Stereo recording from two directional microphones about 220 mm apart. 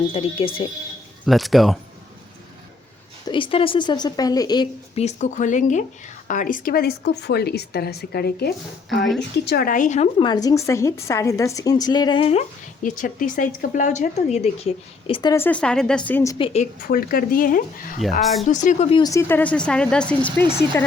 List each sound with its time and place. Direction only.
0.1 s a woman's voice: 25° left (ahead or behind)
1.2 s speech: centre (ahead or behind)
3.2 s a woman's voice: 25° left (ahead or behind)
16.9 s speech: 40° left (ahead or behind)
18.2 s speech: centre (ahead or behind)
18.4 s speech: 35° left (ahead or behind); by 20.8 s 10° left (ahead or behind)